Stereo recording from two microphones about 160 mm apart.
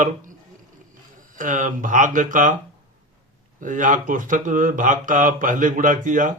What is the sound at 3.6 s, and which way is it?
Speech, 55° right (ahead or behind).